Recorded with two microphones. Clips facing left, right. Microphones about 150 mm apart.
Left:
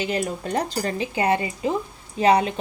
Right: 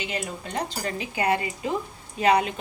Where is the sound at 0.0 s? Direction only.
40° left (ahead or behind).